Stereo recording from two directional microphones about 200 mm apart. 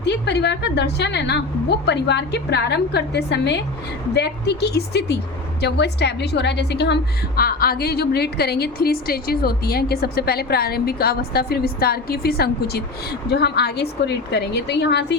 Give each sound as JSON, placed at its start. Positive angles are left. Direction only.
{"t": 0.0, "sound": "a woman's voice", "side_deg": 60}